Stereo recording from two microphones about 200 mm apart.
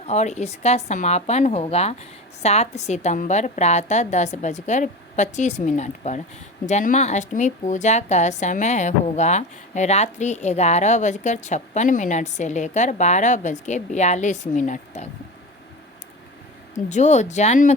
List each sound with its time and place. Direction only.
0.0 s a woman's voice: 35° left (ahead or behind)
16.7 s a woman's voice: 35° left (ahead or behind)